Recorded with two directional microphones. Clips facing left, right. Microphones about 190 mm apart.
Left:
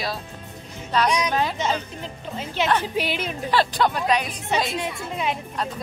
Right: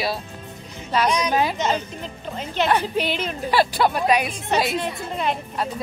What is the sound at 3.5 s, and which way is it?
Speech, 10° right (ahead or behind).